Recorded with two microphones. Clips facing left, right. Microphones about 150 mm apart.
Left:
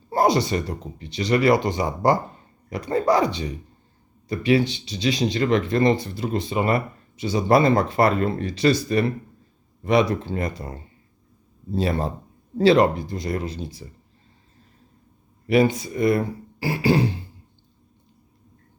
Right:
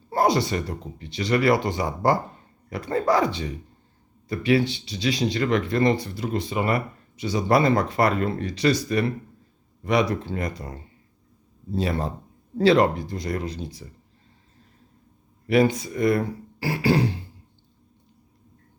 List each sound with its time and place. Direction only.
0.1 s speech: 20° left (ahead or behind)
12.5 s speech: 20° left (ahead or behind)
15.8 s speech: 25° left (ahead or behind)